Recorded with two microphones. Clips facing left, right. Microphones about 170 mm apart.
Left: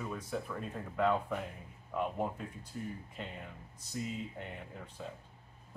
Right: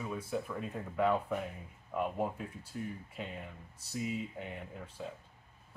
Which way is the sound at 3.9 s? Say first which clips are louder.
Right 2 dB; 5° right (ahead or behind).